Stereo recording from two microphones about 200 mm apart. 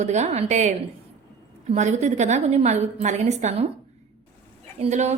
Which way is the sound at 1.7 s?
35° right (ahead or behind).